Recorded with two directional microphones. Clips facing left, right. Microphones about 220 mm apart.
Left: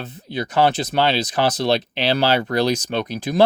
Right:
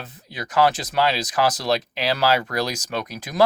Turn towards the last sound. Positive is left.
turn(degrees=30)  # may be behind; listen again after turning